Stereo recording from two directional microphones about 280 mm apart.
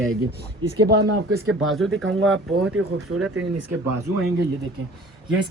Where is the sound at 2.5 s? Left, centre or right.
Right.